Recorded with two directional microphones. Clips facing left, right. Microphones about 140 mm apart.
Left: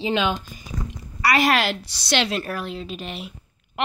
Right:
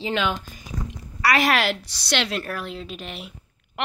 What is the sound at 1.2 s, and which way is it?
A woman's voice, centre (ahead or behind).